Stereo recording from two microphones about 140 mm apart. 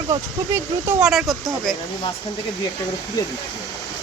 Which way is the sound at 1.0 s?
5° right (ahead or behind).